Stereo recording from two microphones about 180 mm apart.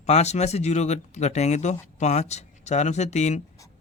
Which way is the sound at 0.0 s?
40° left (ahead or behind).